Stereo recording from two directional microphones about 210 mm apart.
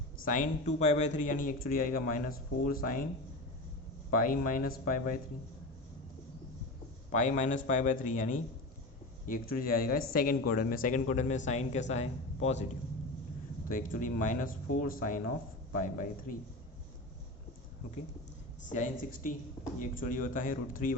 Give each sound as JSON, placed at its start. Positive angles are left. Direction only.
{"t": 0.3, "sound": "speech", "side_deg": 35}
{"t": 4.2, "sound": "speech", "side_deg": 40}
{"t": 7.1, "sound": "speech", "side_deg": 35}
{"t": 13.7, "sound": "speech", "side_deg": 40}
{"t": 18.7, "sound": "speech", "side_deg": 40}